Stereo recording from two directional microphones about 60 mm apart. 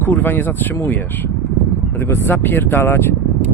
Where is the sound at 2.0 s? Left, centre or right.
Left.